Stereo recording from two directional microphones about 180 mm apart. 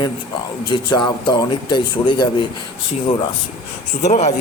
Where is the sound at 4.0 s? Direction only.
40° left (ahead or behind).